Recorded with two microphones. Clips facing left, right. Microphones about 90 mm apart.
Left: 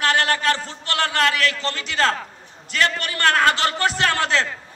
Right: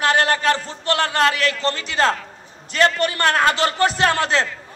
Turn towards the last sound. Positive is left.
turn(degrees=-20)  # may be behind; listen again after turning